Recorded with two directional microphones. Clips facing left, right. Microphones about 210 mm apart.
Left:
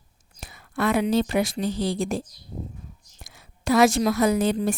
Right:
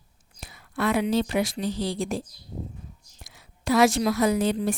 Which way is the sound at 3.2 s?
45° left (ahead or behind).